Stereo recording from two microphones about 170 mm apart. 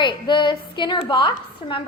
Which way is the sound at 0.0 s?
30° left (ahead or behind).